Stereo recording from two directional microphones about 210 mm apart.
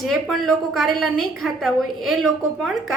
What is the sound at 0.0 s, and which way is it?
A woman's voice, centre (ahead or behind).